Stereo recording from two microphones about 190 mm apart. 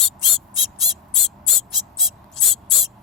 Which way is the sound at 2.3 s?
Centre (ahead or behind).